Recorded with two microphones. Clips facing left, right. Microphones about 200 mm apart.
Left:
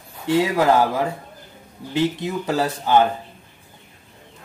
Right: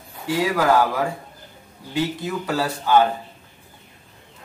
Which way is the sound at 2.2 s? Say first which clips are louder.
Left 2 dB; 25° left (ahead or behind).